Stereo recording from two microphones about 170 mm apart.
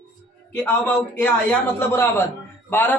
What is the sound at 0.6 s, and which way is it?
A man's voice, 10° left (ahead or behind).